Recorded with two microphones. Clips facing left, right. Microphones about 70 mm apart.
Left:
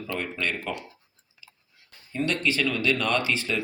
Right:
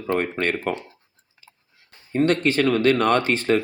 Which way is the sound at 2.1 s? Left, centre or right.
Right.